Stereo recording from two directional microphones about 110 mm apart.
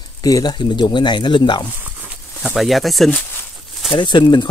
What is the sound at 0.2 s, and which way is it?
Speech, 35° left (ahead or behind).